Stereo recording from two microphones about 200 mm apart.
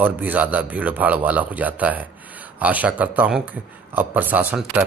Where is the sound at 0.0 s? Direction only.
10° right (ahead or behind).